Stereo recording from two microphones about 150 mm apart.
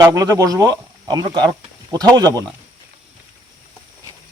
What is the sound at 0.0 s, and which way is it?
Speech, 25° right (ahead or behind).